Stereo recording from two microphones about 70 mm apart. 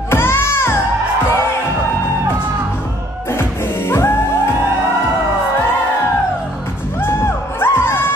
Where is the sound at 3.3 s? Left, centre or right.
Left.